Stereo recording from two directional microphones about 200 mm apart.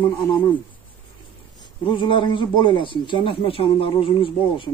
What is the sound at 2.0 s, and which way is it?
Speech, 25° left (ahead or behind).